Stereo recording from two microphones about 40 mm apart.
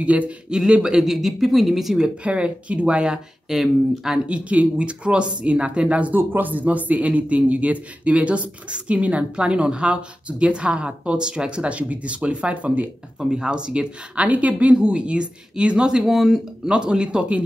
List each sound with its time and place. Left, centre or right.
0.0 s a man's voice: right
0.7 s speech: right
0.9 s speech: centre
2.2 s speech: right
3.4 s speech: centre
4.3 s a man's voice: right
6.1 s a man's voice: right
13.2 s speech: right
16.0 s speech: centre
16.6 s speech: right